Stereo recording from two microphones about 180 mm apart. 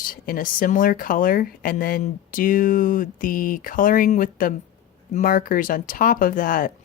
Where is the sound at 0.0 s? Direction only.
50° left (ahead or behind).